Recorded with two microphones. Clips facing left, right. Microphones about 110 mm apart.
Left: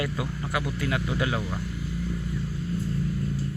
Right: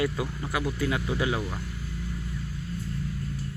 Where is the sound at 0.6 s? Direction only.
20° right (ahead or behind).